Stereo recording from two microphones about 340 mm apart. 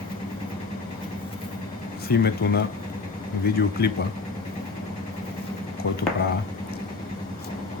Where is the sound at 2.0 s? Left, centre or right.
Left.